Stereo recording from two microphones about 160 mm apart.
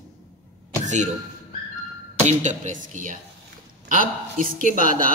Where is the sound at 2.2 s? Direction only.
50° right (ahead or behind).